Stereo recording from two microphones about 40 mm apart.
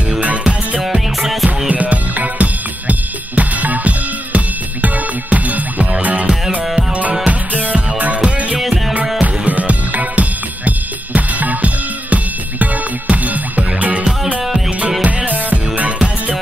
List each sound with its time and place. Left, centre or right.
0.7 s music: centre
1.7 s music: right
8.5 s music: centre
9.2 s music: right